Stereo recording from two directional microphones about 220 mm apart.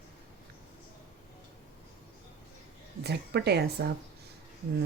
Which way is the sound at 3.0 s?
50° right (ahead or behind).